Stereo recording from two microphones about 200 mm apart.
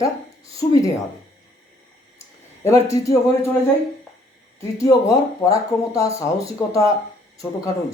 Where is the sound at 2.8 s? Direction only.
15° left (ahead or behind).